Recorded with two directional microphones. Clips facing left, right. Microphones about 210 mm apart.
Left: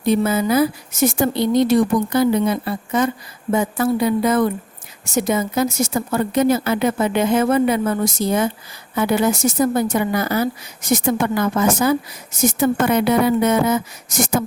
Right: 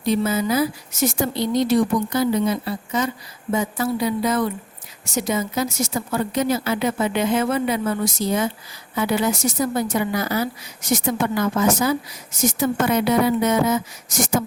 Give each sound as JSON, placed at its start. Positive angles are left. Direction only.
{"t": 0.0, "sound": "speech", "side_deg": 55}